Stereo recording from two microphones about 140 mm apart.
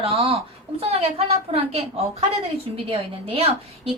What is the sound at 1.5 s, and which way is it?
A woman's voice, 45° right (ahead or behind).